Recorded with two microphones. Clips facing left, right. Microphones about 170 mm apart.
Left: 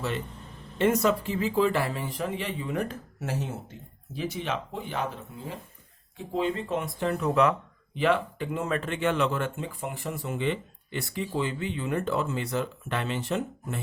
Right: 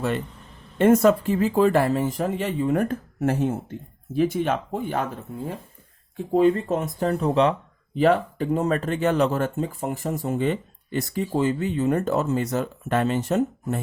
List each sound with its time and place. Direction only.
0.8 s speech: 50° right (ahead or behind); by 7.5 s 30° right (ahead or behind)
7.9 s speech: 40° right (ahead or behind)